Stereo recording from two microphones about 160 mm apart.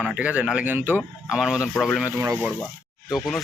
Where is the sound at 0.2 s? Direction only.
10° right (ahead or behind).